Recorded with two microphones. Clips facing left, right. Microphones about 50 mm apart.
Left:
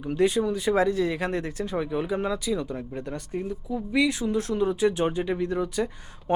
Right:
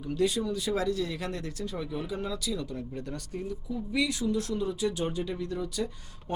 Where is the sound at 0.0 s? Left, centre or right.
Left.